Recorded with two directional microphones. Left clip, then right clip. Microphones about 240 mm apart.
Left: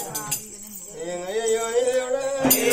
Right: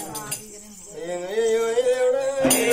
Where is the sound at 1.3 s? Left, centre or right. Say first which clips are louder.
Right 2 dB; centre.